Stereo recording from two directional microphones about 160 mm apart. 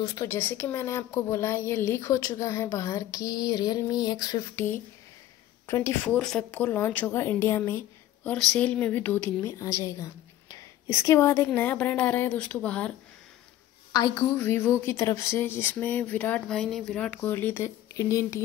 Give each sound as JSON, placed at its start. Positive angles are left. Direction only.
{"t": 0.0, "sound": "a woman's voice", "side_deg": 20}
{"t": 6.0, "sound": "a woman's voice", "side_deg": 5}
{"t": 13.9, "sound": "a woman's voice", "side_deg": 25}